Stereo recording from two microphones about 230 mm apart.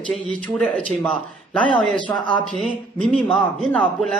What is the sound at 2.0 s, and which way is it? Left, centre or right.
Speech, left.